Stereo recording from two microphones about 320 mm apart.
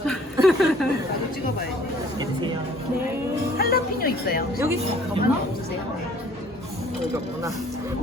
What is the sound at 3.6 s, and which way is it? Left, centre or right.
Speech, left.